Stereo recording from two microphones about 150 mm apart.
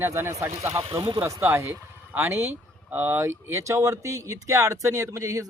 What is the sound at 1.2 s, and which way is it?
Speech, 15° right (ahead or behind).